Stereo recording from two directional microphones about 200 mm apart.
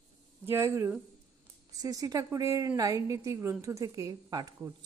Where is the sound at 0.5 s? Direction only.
15° right (ahead or behind).